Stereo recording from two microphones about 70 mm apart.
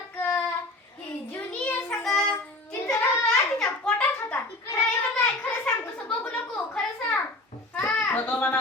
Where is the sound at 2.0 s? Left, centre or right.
Centre.